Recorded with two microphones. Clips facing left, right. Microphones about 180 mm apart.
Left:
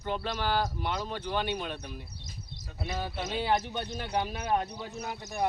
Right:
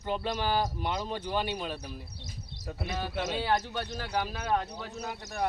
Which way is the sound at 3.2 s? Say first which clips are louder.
Even; 20° left (ahead or behind).